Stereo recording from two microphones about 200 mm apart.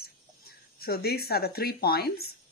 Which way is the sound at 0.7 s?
50° left (ahead or behind).